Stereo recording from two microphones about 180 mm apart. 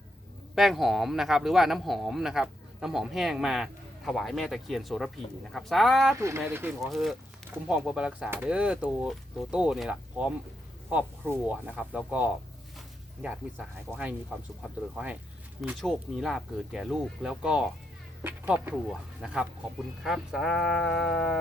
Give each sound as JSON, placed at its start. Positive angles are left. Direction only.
{"t": 0.5, "sound": "a man's voice", "side_deg": 0}
{"t": 6.1, "sound": "speech", "side_deg": -15}
{"t": 6.9, "sound": "a man's voice", "side_deg": 0}